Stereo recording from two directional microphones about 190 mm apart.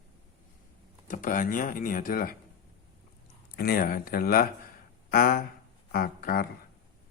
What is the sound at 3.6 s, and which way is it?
Speech, 50° left (ahead or behind).